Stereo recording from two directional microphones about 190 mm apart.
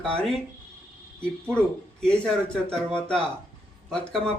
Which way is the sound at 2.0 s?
5° left (ahead or behind).